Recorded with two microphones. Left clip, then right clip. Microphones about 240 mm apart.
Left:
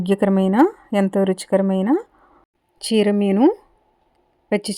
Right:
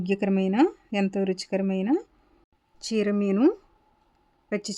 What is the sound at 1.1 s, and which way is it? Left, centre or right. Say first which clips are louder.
A woman's voice: left 9 dB; centre.